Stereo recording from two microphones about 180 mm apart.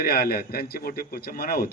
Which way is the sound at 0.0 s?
60° left (ahead or behind).